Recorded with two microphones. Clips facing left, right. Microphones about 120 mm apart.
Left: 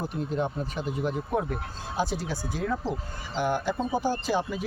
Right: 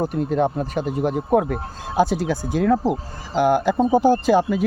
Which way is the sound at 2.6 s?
80° right.